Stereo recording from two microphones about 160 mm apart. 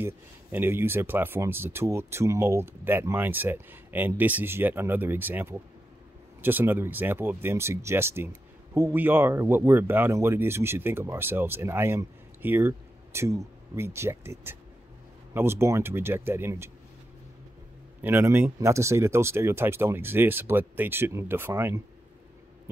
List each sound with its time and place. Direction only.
0.0 s speech: 15° right (ahead or behind)
18.0 s speech: 15° right (ahead or behind)